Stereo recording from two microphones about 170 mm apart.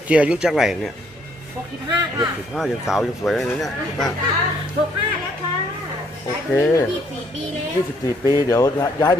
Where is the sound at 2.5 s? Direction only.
Centre (ahead or behind).